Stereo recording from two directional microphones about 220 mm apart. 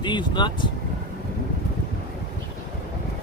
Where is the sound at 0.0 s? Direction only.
20° left (ahead or behind).